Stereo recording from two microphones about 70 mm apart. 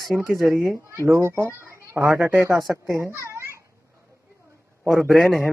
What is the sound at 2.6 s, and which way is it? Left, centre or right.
Speech, centre.